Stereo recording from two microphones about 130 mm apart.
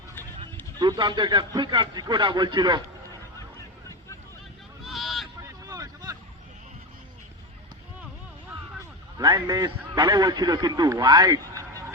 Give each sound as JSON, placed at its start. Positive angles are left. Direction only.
{"t": 0.8, "sound": "a man's voice", "side_deg": -35}
{"t": 4.8, "sound": "vehicle", "side_deg": 0}
{"t": 5.4, "sound": "vehicle", "side_deg": -30}
{"t": 9.1, "sound": "a man's voice", "side_deg": -30}